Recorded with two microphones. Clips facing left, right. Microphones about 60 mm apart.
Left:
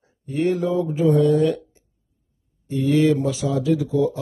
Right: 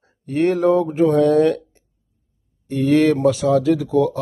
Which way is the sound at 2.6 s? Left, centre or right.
Right.